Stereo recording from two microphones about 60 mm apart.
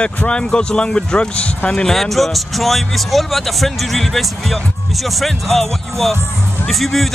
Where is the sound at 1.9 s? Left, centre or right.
Centre.